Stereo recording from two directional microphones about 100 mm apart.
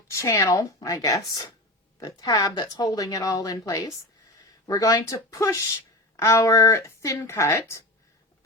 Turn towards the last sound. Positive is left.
turn(degrees=30)  # may be behind; listen again after turning